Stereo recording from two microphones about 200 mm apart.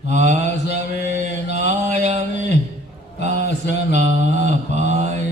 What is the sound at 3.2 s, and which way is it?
Mantra, 35° right (ahead or behind).